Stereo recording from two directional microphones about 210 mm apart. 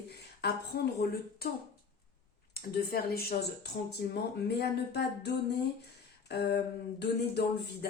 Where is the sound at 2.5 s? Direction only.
45° left (ahead or behind).